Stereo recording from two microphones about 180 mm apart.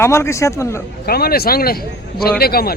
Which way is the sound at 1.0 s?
60° left (ahead or behind).